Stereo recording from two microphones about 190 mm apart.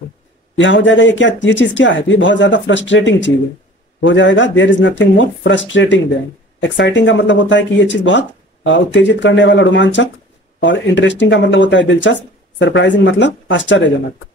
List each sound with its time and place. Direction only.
0.6 s speech: 75° left (ahead or behind)